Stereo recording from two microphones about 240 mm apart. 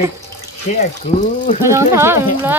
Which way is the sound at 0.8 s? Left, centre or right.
Left.